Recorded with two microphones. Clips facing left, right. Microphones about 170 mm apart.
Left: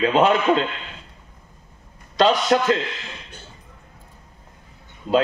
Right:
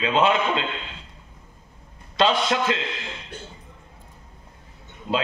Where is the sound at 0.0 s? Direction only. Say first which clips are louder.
Left 3 dB; 45° left (ahead or behind).